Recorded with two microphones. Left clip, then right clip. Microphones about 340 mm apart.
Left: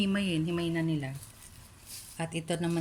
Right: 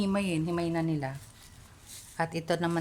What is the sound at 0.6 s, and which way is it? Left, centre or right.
Speech, right.